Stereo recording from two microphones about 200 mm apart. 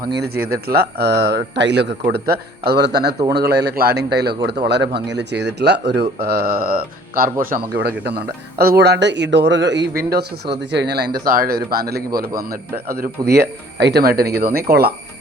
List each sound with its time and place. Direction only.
0.0 s speech: 50° right (ahead or behind)